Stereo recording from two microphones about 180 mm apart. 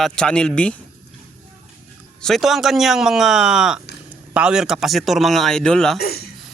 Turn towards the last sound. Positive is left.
turn(degrees=60)  # may be behind; listen again after turning